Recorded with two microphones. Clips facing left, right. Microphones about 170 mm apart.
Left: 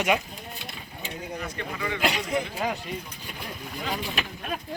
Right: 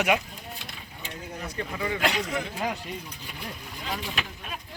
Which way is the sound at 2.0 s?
15° left (ahead or behind).